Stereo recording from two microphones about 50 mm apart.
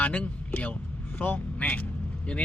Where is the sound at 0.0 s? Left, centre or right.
Left.